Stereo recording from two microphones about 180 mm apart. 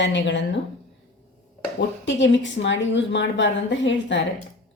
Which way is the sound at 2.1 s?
90° left.